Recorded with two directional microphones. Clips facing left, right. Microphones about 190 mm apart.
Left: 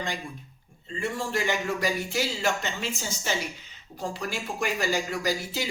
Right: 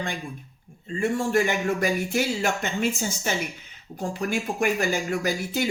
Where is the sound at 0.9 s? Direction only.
50° right (ahead or behind).